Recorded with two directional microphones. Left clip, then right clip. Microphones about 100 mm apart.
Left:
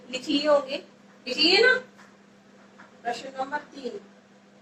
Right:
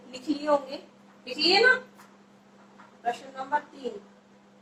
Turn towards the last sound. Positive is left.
turn(degrees=35)  # may be behind; listen again after turning